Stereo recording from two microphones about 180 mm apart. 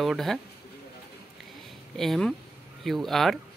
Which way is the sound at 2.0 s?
Centre (ahead or behind).